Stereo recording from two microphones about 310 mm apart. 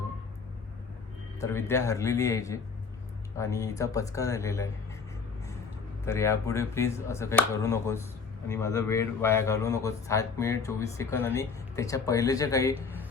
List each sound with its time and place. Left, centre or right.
1.4 s a man's voice: centre
6.1 s a man's voice: centre